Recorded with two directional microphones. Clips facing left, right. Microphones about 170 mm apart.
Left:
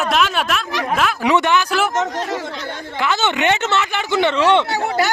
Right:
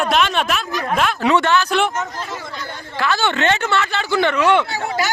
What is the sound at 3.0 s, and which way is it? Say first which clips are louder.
Speech: even; 20° left (ahead or behind).